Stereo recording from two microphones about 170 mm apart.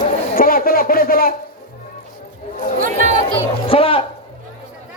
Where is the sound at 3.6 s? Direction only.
35° left (ahead or behind).